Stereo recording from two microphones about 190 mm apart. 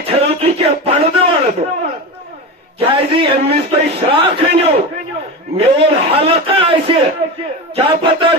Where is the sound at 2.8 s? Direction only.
30° right (ahead or behind).